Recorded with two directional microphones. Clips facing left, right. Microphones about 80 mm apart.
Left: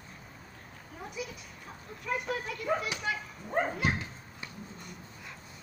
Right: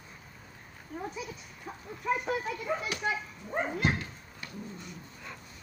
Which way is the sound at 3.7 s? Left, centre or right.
Centre.